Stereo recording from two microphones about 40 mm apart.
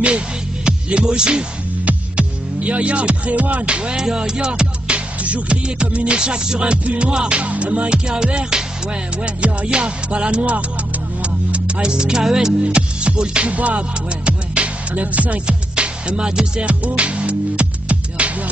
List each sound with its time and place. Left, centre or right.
0.7 s music: right
1.9 s music: right
3.9 s music: centre
12.6 s music: right
13.5 s music: right